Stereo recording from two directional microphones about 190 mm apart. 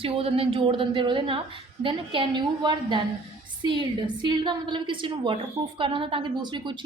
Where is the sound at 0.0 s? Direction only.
30° right (ahead or behind).